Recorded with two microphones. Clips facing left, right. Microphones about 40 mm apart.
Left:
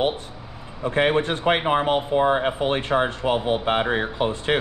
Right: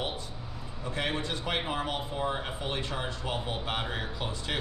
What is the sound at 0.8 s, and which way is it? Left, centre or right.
Speech, left.